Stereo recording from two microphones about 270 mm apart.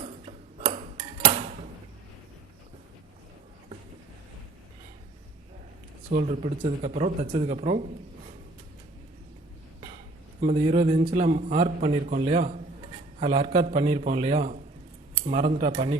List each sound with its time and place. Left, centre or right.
0.0 s tick-tock: right
6.1 s a man's voice: right
10.4 s a man's voice: right